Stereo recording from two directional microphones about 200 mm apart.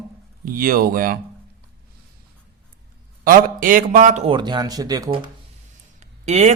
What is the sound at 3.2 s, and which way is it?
Speech, 40° right (ahead or behind).